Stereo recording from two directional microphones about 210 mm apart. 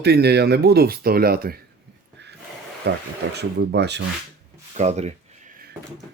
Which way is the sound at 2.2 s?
55° right (ahead or behind).